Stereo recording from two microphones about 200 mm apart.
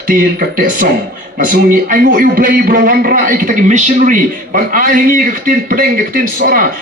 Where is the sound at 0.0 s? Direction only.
45° right (ahead or behind).